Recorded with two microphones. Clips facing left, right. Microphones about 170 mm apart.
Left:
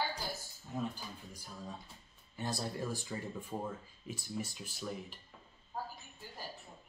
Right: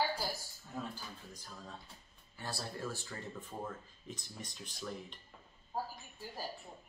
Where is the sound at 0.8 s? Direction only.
10° left (ahead or behind).